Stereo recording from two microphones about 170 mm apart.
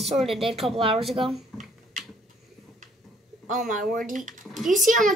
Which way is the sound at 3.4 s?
50° right (ahead or behind).